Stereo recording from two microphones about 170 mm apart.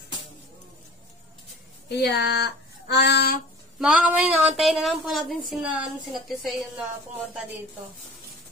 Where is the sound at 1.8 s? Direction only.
80° left.